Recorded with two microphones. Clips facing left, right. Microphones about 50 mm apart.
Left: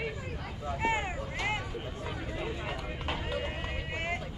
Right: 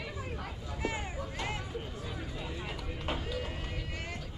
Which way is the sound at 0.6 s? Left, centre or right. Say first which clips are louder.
Left 7 dB; left.